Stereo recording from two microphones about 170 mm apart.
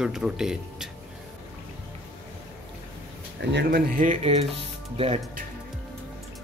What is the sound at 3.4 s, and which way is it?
Speech, 90° right.